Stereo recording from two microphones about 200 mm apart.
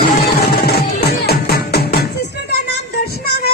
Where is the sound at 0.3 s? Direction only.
50° left (ahead or behind).